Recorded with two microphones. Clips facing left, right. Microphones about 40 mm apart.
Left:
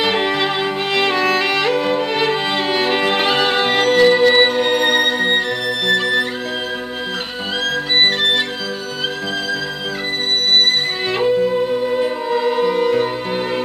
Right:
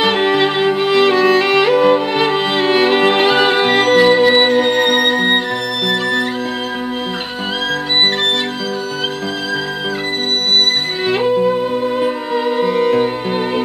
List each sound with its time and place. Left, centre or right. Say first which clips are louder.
0.0 s music: right 4 dB; centre
5.9 s music: left 1 dB; centre
11.1 s music: right 3 dB; centre